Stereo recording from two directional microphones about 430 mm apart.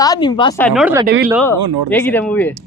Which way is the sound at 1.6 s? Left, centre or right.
Right.